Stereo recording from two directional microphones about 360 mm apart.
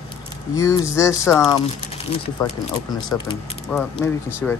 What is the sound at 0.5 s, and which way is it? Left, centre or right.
Speech, centre.